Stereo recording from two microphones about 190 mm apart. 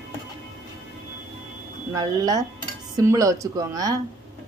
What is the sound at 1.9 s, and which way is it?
Speech, 20° right (ahead or behind).